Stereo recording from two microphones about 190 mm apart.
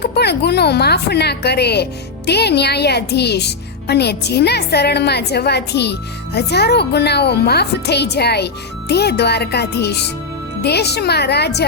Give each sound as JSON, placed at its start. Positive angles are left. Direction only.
{"t": 0.0, "sound": "speech", "side_deg": 60}